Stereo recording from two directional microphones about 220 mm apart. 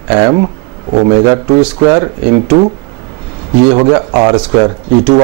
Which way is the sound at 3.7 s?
25° right (ahead or behind).